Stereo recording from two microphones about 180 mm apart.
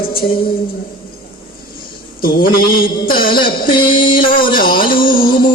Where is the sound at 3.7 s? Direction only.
25° left (ahead or behind).